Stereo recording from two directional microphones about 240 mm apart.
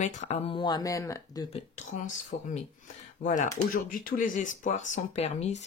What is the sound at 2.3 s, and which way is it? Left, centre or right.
Speech, left.